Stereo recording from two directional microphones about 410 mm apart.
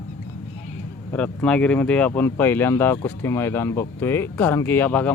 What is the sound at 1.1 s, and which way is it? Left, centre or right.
Speech, centre.